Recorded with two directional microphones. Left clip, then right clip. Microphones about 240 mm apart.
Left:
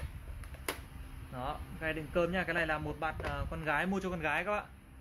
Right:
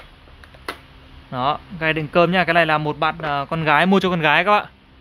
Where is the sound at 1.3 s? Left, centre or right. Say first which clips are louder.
Right 19 dB; right.